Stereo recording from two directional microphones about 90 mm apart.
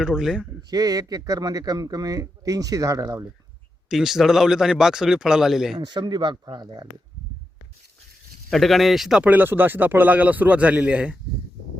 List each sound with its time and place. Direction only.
0.0 s speech: 5° right (ahead or behind)
0.7 s speech: 45° right (ahead or behind)
3.8 s speech: 5° right (ahead or behind)
5.8 s speech: 55° right (ahead or behind)
8.4 s speech: 5° left (ahead or behind)
9.2 s speech: 20° right (ahead or behind)